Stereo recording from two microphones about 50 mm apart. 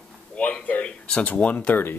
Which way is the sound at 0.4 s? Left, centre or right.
Left.